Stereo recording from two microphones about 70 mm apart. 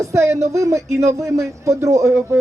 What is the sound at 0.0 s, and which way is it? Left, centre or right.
Speech, right.